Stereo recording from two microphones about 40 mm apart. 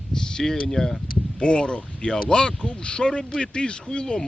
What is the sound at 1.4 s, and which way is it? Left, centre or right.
Speech, left.